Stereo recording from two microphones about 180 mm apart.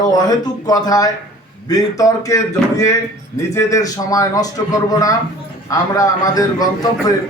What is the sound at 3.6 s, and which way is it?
Speech, 15° left (ahead or behind).